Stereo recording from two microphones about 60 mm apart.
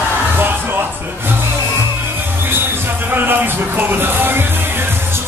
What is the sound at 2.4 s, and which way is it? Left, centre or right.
Music, right.